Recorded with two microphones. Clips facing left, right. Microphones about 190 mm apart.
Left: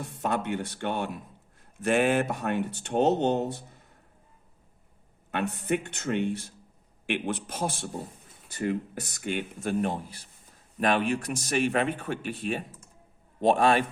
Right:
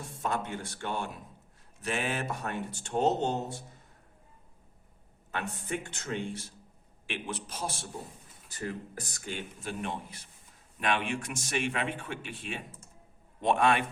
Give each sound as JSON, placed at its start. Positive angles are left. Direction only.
{"t": 0.2, "sound": "speech", "side_deg": 60}
{"t": 5.3, "sound": "speech", "side_deg": 65}
{"t": 8.4, "sound": "speech", "side_deg": 65}
{"t": 9.6, "sound": "speech", "side_deg": 45}